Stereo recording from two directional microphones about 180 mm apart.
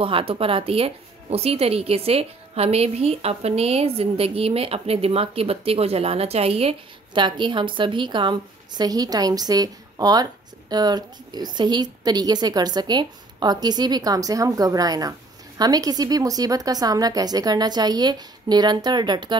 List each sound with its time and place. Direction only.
0.0 s a woman's voice: 30° right (ahead or behind)